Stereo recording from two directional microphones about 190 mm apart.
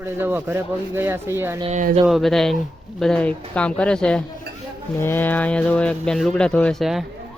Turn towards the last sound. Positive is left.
turn(degrees=0)  # may be behind; listen again after turning